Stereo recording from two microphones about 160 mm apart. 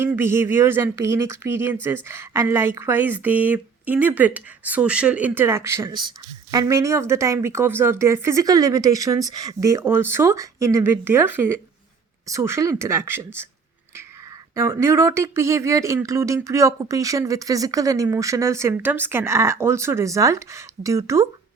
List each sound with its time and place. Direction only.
0.0 s speech: 15° right (ahead or behind)
14.5 s speech: 20° right (ahead or behind)